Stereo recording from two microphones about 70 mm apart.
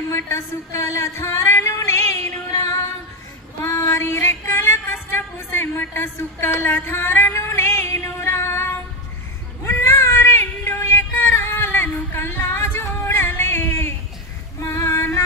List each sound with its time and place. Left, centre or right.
0.1 s a sound: left
2.5 s female singing: left
9.7 s child singing: left
14.6 s female singing: left